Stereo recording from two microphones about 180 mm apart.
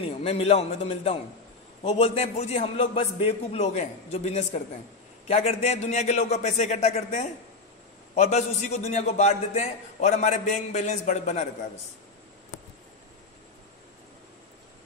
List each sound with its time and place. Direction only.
0.0 s a man's voice: 30° left (ahead or behind)